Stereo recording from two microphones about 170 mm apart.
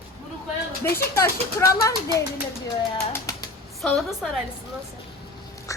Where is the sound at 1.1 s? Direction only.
15° left (ahead or behind).